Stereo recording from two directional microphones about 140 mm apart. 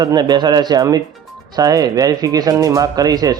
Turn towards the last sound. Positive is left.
turn(degrees=-25)  # may be behind; listen again after turning